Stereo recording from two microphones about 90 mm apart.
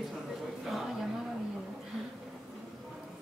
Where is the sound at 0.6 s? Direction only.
5° right (ahead or behind).